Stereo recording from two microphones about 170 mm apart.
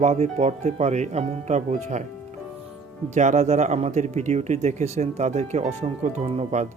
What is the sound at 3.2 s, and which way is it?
Speech, 45° right (ahead or behind).